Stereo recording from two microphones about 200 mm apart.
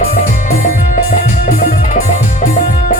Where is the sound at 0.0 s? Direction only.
50° left (ahead or behind).